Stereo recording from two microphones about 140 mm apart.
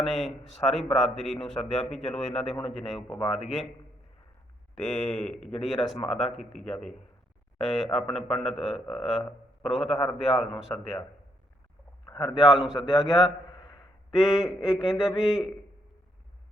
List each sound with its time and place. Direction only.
0.0 s speech: centre (ahead or behind)
4.8 s speech: centre (ahead or behind)
12.0 s a sound: 35° left (ahead or behind)
12.5 s speech: centre (ahead or behind)
12.7 s speech: 30° left (ahead or behind)
13.1 s a sound: 25° left (ahead or behind)
14.2 s speech: centre (ahead or behind)